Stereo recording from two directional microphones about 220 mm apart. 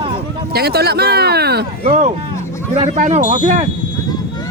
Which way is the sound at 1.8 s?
30° right (ahead or behind).